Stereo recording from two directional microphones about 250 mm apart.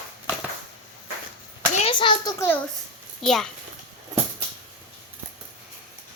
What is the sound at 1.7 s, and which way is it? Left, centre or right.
Speech, left.